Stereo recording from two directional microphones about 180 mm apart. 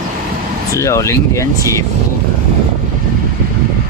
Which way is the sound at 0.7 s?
15° left (ahead or behind).